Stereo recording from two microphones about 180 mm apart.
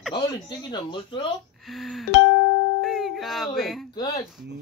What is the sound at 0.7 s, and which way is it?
Speech, 25° left (ahead or behind).